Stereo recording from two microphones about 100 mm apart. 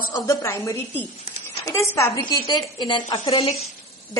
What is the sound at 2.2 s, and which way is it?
A woman's voice, 45° left (ahead or behind).